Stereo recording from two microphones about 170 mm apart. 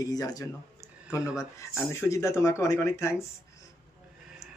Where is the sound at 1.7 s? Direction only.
15° left (ahead or behind).